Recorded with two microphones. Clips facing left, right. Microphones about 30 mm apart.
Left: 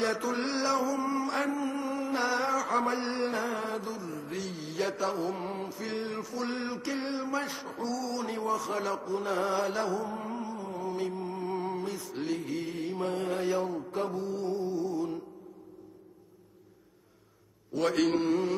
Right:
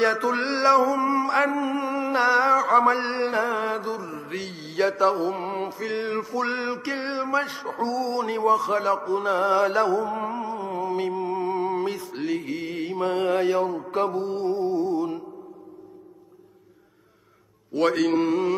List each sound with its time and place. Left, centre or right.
0.2 s mantra: right
0.6 s music: right
2.7 s mantra: right
5.9 s mantra: right
10.1 s music: right
12.4 s mantra: right
13.7 s music: right
17.9 s mantra: centre